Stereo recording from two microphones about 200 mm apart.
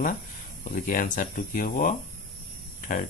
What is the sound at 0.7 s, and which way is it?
A man's voice, 40° left (ahead or behind).